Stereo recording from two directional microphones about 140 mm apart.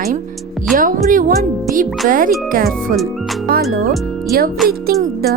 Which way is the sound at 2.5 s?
90° right.